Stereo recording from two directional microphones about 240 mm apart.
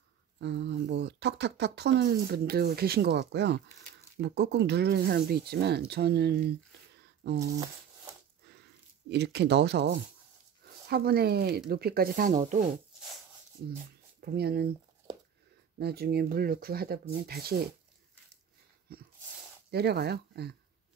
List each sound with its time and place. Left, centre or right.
0.4 s speech: right
9.1 s speech: right
14.2 s speech: right
15.8 s speech: right
18.9 s a sound: right
19.7 s speech: right